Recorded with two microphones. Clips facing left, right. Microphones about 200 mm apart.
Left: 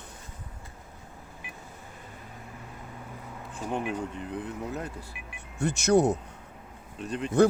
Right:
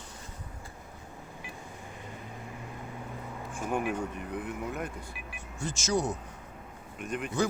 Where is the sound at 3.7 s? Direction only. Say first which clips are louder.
Even; 20° left (ahead or behind).